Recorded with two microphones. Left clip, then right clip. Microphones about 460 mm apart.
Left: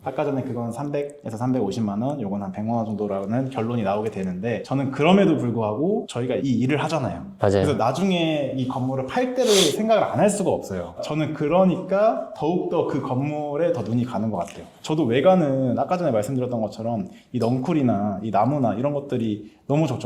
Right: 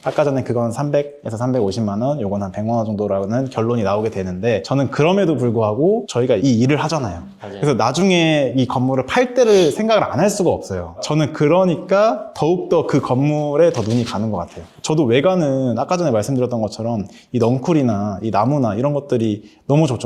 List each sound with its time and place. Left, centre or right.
0.2 s speech: right
0.6 s speech: right
1.4 s speech: right
9.5 s speech: left
9.7 s speech: right
11.2 s speech: right
12.4 s speech: right